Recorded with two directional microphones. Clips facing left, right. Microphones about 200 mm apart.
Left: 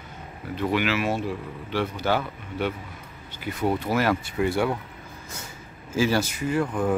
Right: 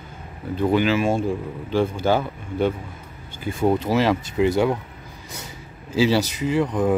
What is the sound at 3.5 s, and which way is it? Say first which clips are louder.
Speech: right 5 dB; 25° right (ahead or behind).